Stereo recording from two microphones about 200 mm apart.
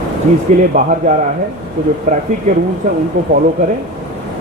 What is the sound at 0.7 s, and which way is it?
Speech, 40° right (ahead or behind).